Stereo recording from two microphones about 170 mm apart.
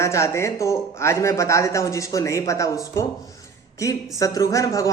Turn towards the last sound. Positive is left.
turn(degrees=20)  # may be behind; listen again after turning